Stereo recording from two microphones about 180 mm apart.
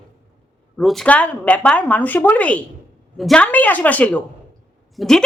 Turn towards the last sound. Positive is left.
turn(degrees=5)  # may be behind; listen again after turning